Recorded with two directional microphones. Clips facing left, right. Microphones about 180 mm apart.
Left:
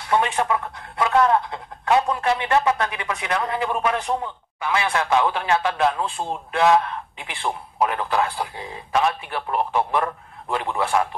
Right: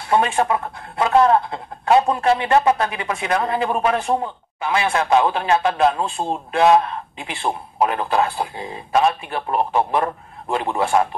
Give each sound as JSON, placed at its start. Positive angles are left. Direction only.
{"t": 0.1, "sound": "a man's voice", "side_deg": -25}